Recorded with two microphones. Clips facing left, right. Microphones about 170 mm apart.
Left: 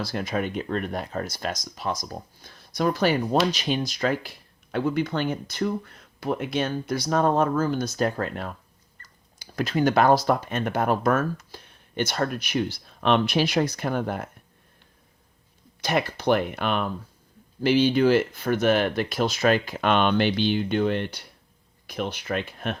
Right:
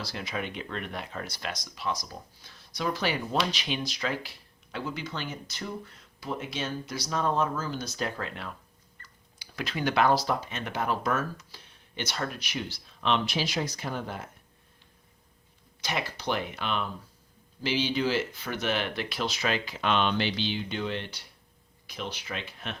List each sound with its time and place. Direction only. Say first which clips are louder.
0.0 s speech: left 7 dB; 50° left (ahead or behind)
15.8 s speech: left 8 dB; 55° left (ahead or behind)